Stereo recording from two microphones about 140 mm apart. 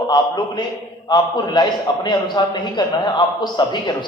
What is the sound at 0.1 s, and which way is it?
A man's voice, 30° left (ahead or behind).